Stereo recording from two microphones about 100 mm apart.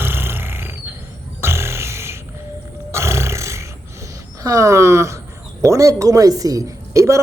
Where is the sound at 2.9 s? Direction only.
30° right (ahead or behind).